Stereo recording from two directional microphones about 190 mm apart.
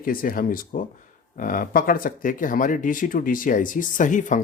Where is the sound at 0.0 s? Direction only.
45° left (ahead or behind).